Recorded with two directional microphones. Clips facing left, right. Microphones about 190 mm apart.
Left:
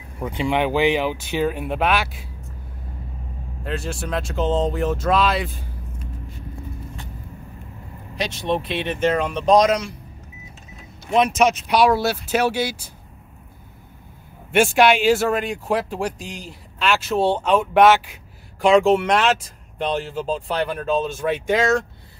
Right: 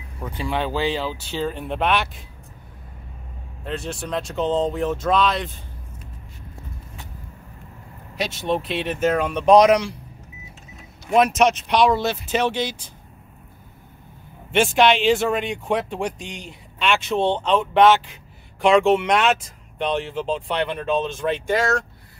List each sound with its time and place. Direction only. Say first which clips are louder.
0.2 s speech: left 4 dB; 20° left (ahead or behind)
3.6 s speech: left 1 dB; centre (ahead or behind)
8.2 s speech: even; 5° right (ahead or behind)
11.1 s speech: even; centre (ahead or behind)
14.5 s speech: left 1 dB; 10° left (ahead or behind)
21.5 s speech: left 4 dB; 20° left (ahead or behind)